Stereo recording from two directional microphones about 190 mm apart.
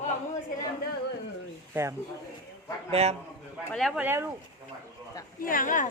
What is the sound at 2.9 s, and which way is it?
Speech, 35° right (ahead or behind).